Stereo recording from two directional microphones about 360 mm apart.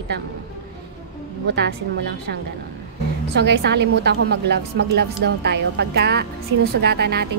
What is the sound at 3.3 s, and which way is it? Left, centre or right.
A woman's voice, right.